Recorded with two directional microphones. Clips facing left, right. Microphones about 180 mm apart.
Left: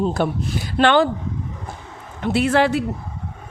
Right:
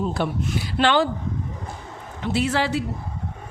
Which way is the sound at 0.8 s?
55° left (ahead or behind).